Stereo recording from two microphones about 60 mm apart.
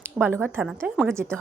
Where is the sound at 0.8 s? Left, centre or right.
Right.